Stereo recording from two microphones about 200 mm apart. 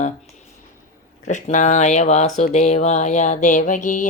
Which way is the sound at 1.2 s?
40° left (ahead or behind).